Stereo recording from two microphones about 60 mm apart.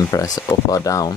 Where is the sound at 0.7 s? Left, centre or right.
Left.